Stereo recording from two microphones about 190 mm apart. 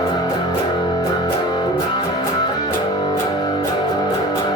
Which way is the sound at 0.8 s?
20° left (ahead or behind).